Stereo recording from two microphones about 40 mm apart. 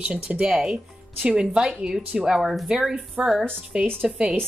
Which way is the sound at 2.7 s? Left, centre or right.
Centre.